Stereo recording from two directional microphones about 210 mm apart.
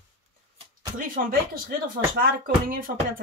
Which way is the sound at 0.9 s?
45° right (ahead or behind).